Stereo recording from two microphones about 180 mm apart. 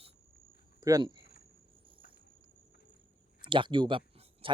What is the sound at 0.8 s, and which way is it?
Speech, 20° right (ahead or behind).